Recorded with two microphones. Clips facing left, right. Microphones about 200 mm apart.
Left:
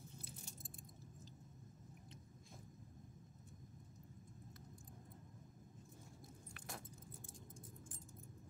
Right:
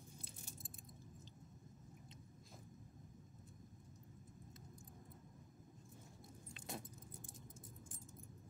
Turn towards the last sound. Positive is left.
turn(degrees=-20)  # may be behind; listen again after turning